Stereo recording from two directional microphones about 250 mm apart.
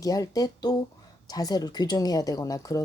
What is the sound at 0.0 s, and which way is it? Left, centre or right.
Speech, centre.